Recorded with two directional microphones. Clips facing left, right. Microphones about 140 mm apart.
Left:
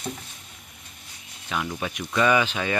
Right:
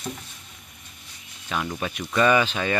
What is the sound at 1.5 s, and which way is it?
Speech, 5° right (ahead or behind).